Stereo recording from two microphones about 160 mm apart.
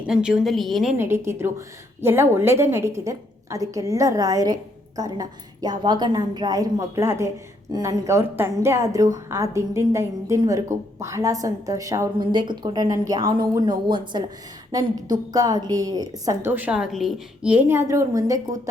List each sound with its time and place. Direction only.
0.0 s a woman's voice: 5° right (ahead or behind)
0.9 s a woman's voice: 15° right (ahead or behind)